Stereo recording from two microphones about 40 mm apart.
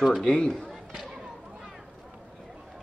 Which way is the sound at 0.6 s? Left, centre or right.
Centre.